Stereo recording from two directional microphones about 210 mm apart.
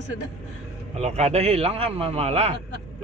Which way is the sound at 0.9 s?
30° right (ahead or behind).